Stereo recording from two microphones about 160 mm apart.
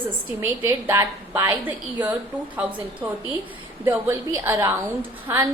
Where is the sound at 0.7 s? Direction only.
15° right (ahead or behind).